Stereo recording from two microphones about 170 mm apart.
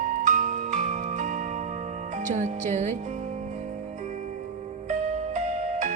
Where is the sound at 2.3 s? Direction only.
45° right (ahead or behind).